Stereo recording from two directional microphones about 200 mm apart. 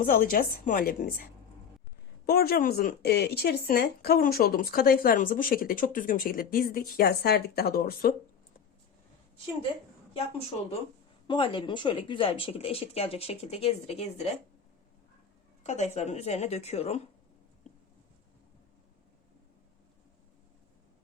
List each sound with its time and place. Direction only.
0.0 s speech: 45° left (ahead or behind)
2.2 s speech: 50° left (ahead or behind)
10.2 s speech: 30° left (ahead or behind)
15.6 s a woman's voice: 35° left (ahead or behind)